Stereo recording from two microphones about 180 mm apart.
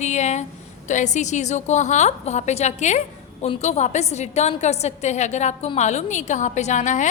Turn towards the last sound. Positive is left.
turn(degrees=45)  # may be behind; listen again after turning